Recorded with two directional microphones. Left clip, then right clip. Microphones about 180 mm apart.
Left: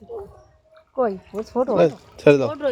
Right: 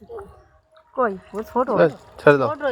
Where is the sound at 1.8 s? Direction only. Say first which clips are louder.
Even; 5° left (ahead or behind).